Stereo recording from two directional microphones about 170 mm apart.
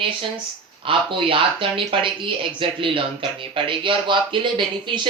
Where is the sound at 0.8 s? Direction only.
30° right (ahead or behind).